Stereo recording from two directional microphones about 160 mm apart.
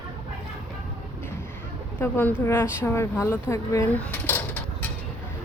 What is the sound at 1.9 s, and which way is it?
Speech, 15° left (ahead or behind).